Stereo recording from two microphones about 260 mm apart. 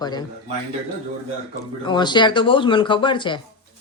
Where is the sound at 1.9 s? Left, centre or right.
Centre.